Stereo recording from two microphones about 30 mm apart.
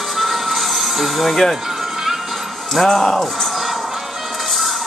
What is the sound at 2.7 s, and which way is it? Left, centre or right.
Speech, centre.